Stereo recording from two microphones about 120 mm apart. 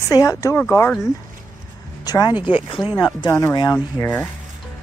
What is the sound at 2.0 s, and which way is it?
Speech, 35° left (ahead or behind).